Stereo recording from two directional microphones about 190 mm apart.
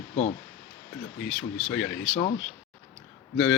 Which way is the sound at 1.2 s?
5° left (ahead or behind).